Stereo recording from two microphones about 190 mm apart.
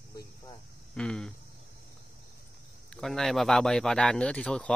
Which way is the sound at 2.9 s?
Centre (ahead or behind).